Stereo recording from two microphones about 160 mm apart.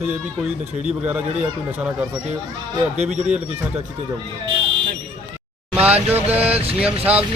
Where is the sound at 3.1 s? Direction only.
5° right (ahead or behind).